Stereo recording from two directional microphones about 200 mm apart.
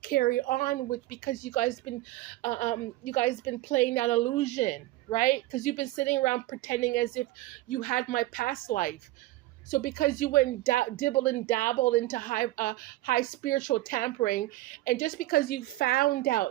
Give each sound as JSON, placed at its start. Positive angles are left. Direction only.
{"t": 0.0, "sound": "a woman's voice", "side_deg": 45}